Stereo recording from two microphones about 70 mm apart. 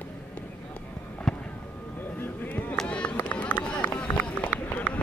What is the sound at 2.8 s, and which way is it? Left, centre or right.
Run, centre.